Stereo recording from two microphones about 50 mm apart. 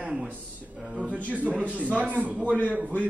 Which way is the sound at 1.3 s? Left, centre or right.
Right.